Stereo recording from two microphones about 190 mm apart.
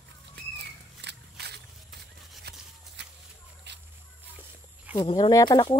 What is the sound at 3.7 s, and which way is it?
Snake, 65° right (ahead or behind).